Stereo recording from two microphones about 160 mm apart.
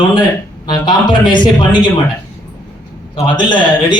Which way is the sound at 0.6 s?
30° left (ahead or behind).